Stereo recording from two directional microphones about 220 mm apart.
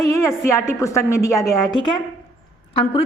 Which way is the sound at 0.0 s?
15° left (ahead or behind).